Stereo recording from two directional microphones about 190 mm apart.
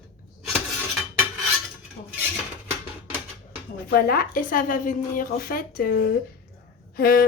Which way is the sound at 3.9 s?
50° left (ahead or behind).